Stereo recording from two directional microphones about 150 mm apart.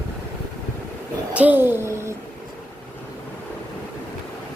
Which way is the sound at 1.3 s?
10° right (ahead or behind).